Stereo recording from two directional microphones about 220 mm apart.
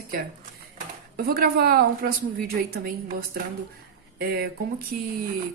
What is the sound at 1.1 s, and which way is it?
A woman's voice, 45° right (ahead or behind).